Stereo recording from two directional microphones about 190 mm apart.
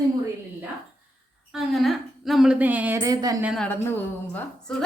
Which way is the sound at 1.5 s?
Centre (ahead or behind).